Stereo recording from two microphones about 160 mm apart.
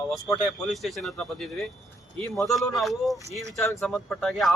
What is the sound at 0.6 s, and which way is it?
A man's voice, centre (ahead or behind).